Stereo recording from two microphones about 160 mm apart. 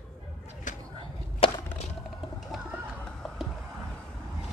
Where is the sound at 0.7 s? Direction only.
50° left (ahead or behind).